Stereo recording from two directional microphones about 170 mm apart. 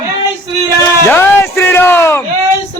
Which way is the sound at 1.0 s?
15° left (ahead or behind).